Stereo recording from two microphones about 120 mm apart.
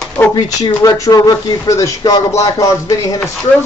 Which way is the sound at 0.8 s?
30° left (ahead or behind).